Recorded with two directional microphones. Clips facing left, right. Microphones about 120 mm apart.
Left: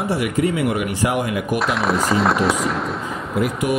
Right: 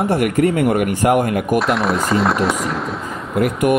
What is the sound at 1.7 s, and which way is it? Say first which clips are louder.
Speech: right 2 dB; centre (ahead or behind).